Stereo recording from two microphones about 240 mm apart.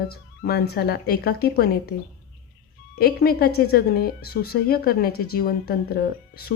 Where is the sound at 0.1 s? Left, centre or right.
Left.